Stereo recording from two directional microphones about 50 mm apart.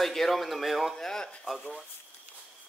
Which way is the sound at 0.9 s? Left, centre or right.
Centre.